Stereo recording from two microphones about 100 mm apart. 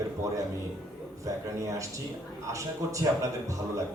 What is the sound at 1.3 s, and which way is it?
A man's voice, 30° right (ahead or behind).